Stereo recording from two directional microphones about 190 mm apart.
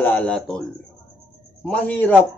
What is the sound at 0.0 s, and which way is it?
A man's voice, 10° left (ahead or behind).